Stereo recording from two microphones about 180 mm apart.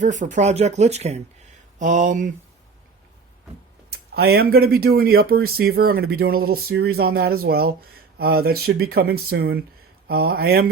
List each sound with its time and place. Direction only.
0.0 s speech: 45° right (ahead or behind)
3.8 s speech: 60° right (ahead or behind)